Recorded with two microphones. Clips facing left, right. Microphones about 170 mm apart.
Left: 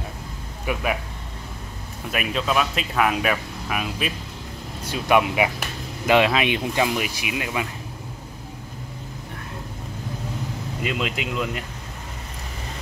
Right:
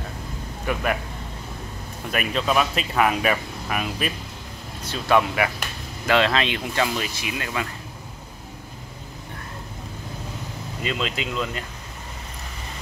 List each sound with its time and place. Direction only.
0.7 s speech: 10° left (ahead or behind)
2.0 s speech: centre (ahead or behind)
4.8 s speech: 15° left (ahead or behind)
10.8 s speech: 10° left (ahead or behind)